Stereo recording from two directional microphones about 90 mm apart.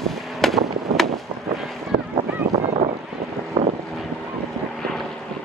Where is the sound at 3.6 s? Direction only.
55° right (ahead or behind).